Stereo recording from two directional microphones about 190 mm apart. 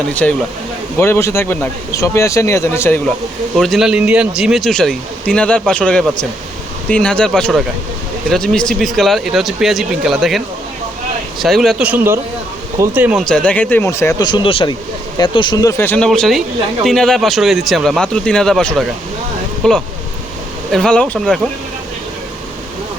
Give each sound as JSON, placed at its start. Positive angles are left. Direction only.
{"t": 0.1, "sound": "speech", "side_deg": 5}
{"t": 3.5, "sound": "speech", "side_deg": 0}
{"t": 13.2, "sound": "speech", "side_deg": 5}
{"t": 15.8, "sound": "speech", "side_deg": 10}